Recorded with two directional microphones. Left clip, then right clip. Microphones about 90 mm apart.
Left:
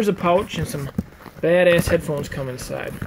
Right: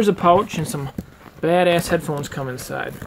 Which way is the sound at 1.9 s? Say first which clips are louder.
Left 1 dB; 40° right (ahead or behind).